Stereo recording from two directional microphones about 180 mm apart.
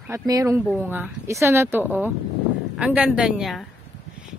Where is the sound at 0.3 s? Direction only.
20° right (ahead or behind).